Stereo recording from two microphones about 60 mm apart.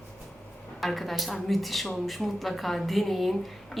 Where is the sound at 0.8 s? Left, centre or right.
Centre.